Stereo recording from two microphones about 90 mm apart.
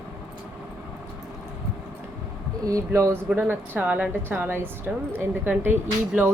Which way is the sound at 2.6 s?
35° right (ahead or behind).